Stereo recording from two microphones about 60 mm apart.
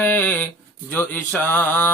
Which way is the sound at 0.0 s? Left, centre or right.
Left.